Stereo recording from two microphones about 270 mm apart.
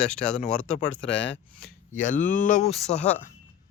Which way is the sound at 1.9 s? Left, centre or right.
Left.